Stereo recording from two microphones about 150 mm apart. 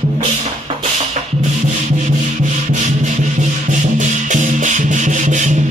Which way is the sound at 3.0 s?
55° right (ahead or behind).